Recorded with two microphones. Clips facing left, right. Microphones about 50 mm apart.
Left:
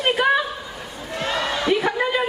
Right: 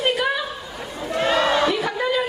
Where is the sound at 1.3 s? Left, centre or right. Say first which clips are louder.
Right 5 dB; centre.